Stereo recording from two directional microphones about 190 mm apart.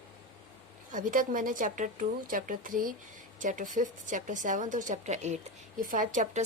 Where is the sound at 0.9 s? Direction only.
45° right (ahead or behind).